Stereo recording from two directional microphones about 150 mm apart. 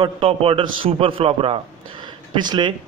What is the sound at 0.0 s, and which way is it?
A man's voice, 40° right (ahead or behind).